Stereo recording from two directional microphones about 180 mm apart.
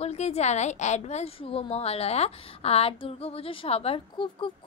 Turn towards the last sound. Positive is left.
turn(degrees=25)  # may be behind; listen again after turning